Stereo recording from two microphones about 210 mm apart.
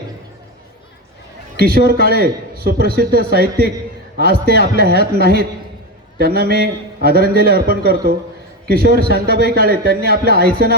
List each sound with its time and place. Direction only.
1.5 s a man's voice: 45° right (ahead or behind)